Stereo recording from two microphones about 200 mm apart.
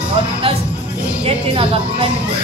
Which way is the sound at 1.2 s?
25° right (ahead or behind).